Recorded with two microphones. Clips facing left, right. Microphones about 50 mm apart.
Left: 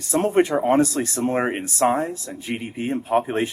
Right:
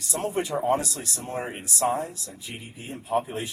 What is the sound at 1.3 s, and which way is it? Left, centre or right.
Speech, left.